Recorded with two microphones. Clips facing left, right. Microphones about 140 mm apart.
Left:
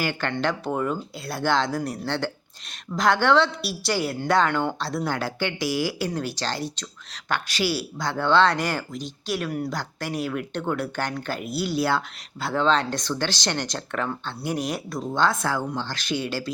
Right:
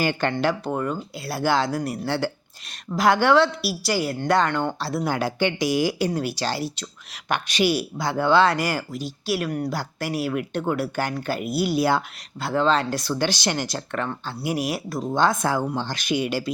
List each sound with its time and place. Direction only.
0.0 s speech: 20° right (ahead or behind)
0.3 s speech: centre (ahead or behind)
12.4 s speech: centre (ahead or behind)